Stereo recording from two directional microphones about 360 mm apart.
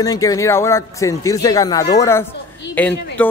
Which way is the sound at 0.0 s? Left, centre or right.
Centre.